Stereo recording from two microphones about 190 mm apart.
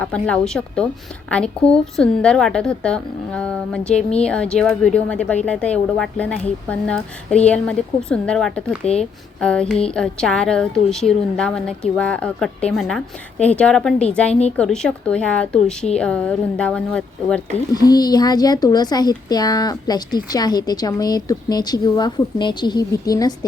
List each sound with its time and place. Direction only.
0.0 s a woman's voice: 5° left (ahead or behind)
17.7 s speech: 20° left (ahead or behind)